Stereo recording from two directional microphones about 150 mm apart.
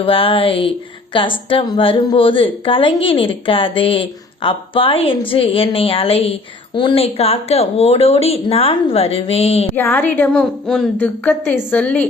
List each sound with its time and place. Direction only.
0.0 s a woman's voice: 35° left (ahead or behind)
9.7 s a woman's voice: 15° left (ahead or behind)